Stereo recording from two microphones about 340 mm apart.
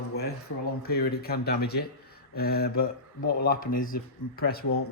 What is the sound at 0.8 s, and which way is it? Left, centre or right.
Speech, left.